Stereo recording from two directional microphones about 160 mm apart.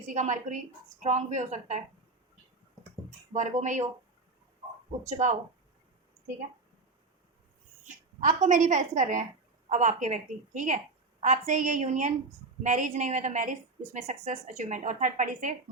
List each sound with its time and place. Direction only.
0.1 s a woman's voice: 50° right (ahead or behind)
3.3 s a woman's voice: 50° right (ahead or behind)
5.0 s a woman's voice: 50° right (ahead or behind)
8.2 s a woman's voice: 50° right (ahead or behind)